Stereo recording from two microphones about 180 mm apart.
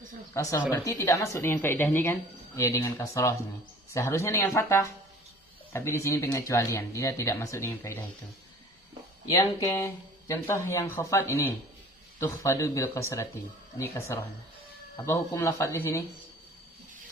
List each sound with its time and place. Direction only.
0.4 s speech: 15° left (ahead or behind)
9.4 s speech: 15° left (ahead or behind)